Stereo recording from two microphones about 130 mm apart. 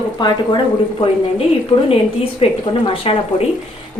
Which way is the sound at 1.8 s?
45° left (ahead or behind).